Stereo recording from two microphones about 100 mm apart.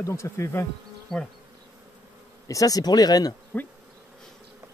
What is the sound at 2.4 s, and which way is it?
Speech, 35° left (ahead or behind).